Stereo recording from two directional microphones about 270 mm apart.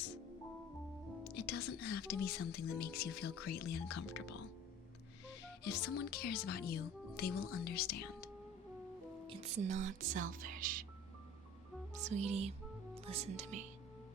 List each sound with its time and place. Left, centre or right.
1.2 s speech: left
5.6 s speech: left
9.2 s speech: right
12.0 s speech: right